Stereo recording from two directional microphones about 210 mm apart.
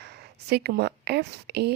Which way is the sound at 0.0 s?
50° right (ahead or behind).